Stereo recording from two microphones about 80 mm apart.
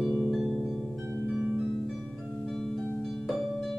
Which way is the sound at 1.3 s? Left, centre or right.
Centre.